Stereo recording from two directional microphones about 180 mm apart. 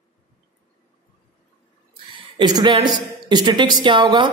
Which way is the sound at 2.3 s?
25° right (ahead or behind).